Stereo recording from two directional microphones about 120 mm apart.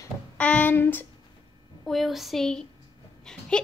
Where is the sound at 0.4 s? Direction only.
10° left (ahead or behind).